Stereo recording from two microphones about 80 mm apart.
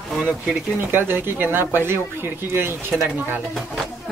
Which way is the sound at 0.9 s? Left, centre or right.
Right.